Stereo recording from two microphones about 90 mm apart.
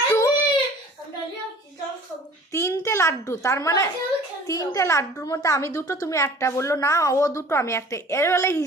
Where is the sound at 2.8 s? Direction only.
30° left (ahead or behind).